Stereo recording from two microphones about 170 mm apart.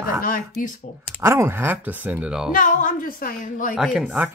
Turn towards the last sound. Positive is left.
turn(degrees=-5)  # may be behind; listen again after turning